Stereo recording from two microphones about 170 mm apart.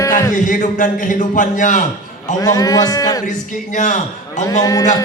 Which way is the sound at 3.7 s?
45° left (ahead or behind).